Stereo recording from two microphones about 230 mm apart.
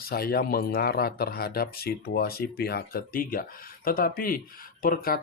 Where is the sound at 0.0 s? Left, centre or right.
Left.